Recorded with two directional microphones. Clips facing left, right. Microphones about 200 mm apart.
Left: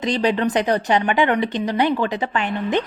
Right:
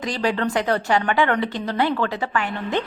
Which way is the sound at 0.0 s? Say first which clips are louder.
Left 3 dB; 20° left (ahead or behind).